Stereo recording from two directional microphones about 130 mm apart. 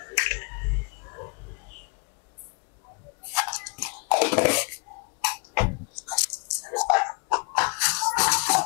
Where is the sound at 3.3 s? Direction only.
20° left (ahead or behind).